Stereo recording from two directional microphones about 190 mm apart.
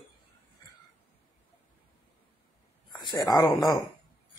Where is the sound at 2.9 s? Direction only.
20° left (ahead or behind).